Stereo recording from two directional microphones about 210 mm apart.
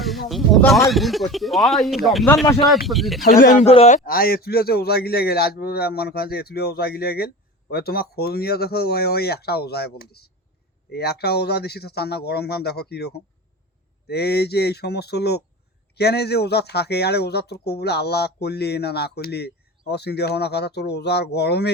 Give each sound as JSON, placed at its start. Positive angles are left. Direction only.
{"t": 0.0, "sound": "a sound", "side_deg": 0}
{"t": 0.9, "sound": "speech", "side_deg": 0}
{"t": 3.2, "sound": "a man's voice", "side_deg": 40}